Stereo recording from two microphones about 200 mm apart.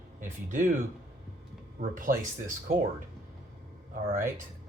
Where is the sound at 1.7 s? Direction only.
40° right (ahead or behind).